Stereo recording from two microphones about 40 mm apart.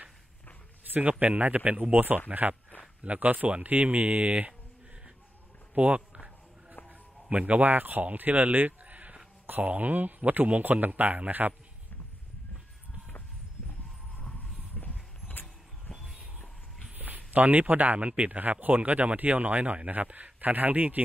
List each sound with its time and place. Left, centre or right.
0.9 s speech: right
2.0 s speech: right
5.8 s speech: right
7.2 s a man's voice: right
14.8 s a sound: left
15.4 s vehicle: centre
16.9 s speech: right